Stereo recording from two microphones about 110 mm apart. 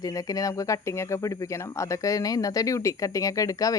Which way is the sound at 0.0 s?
30° left (ahead or behind).